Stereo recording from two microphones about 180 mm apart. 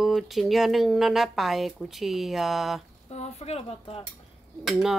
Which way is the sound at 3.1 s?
35° left (ahead or behind).